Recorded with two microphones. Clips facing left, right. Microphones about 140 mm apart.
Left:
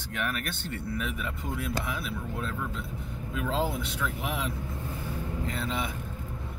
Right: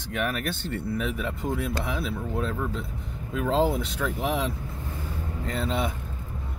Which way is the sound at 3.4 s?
35° right (ahead or behind).